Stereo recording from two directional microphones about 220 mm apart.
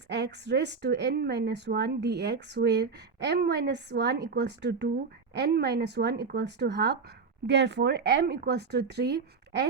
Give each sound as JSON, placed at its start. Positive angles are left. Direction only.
{"t": 0.1, "sound": "speech", "side_deg": -50}